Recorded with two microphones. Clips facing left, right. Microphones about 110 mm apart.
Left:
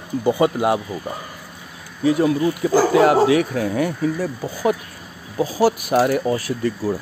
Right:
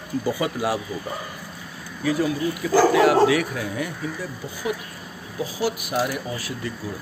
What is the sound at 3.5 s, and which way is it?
Speech, 50° left (ahead or behind).